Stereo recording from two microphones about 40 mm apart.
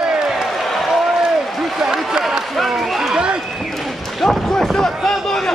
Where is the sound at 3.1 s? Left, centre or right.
Right.